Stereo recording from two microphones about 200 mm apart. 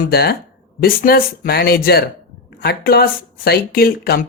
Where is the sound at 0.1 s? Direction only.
50° left (ahead or behind).